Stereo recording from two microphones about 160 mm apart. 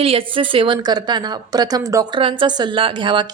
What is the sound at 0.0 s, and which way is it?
A woman's voice, 35° right (ahead or behind).